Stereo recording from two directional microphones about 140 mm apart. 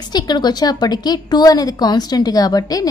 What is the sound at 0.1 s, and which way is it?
A woman's voice, 30° left (ahead or behind).